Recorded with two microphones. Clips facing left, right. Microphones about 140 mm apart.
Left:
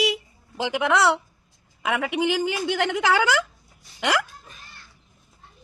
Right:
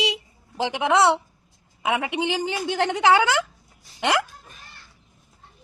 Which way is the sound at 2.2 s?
25° right (ahead or behind).